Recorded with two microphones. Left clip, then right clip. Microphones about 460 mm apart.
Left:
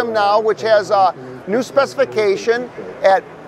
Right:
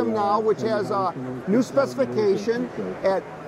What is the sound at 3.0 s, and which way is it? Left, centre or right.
Speech, left.